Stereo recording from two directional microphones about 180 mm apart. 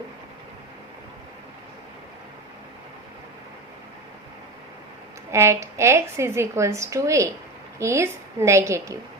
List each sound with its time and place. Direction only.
5.3 s a woman's voice: 15° right (ahead or behind)